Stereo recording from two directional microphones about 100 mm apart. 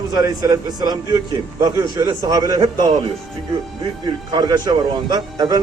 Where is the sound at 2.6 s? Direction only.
45° right (ahead or behind).